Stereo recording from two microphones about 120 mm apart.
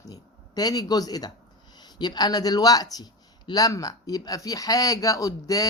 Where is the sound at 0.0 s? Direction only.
30° left (ahead or behind).